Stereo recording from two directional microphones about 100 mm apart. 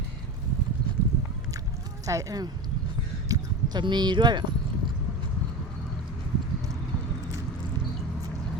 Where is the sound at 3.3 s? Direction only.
45° right (ahead or behind).